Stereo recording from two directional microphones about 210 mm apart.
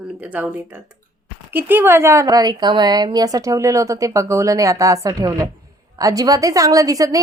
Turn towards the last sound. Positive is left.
turn(degrees=-15)  # may be behind; listen again after turning